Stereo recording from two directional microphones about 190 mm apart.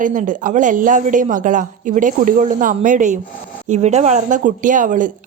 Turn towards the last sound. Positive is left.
turn(degrees=-45)  # may be behind; listen again after turning